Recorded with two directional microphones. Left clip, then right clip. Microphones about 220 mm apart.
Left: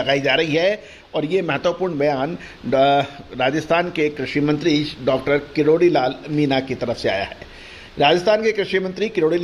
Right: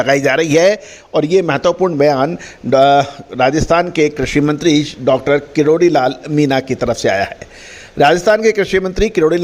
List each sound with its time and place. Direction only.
0.0 s a man's voice: 55° right (ahead or behind)